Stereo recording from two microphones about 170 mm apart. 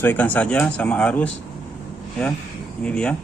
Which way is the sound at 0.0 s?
10° left (ahead or behind).